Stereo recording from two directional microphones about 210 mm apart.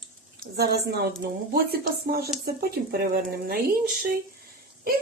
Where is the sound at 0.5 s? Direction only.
50° right (ahead or behind).